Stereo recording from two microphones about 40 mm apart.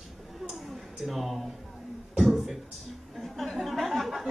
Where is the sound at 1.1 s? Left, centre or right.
Centre.